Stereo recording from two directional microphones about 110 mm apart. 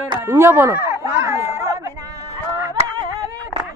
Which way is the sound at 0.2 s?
20° right (ahead or behind).